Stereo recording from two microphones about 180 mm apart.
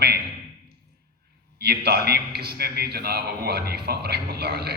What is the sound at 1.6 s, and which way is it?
A man's voice, 60° right (ahead or behind).